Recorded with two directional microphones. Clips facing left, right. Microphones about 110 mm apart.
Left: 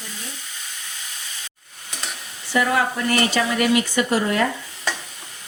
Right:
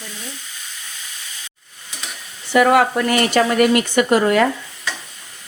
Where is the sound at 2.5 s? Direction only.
75° right (ahead or behind).